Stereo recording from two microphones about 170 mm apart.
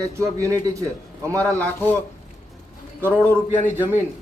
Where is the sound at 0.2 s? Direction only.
20° right (ahead or behind).